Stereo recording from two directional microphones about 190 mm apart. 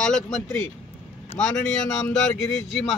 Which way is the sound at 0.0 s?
5° left (ahead or behind).